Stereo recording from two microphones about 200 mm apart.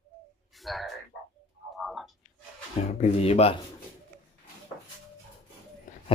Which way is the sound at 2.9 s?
35° left (ahead or behind).